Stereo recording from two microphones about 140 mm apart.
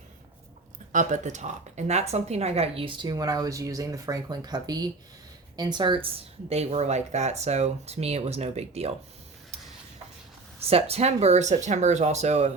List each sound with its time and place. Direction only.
0.9 s speech: 60° right (ahead or behind); by 6.1 s 35° right (ahead or behind)
6.5 s speech: 50° right (ahead or behind)
10.6 s speech: 45° right (ahead or behind)